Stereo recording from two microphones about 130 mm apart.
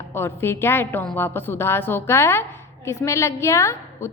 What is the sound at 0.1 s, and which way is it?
A woman's voice, 20° left (ahead or behind).